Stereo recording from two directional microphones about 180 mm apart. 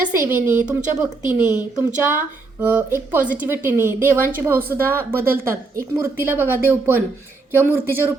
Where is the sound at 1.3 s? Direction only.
10° right (ahead or behind).